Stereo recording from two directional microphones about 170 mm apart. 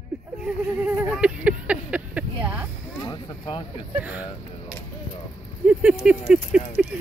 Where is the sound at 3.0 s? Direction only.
25° left (ahead or behind).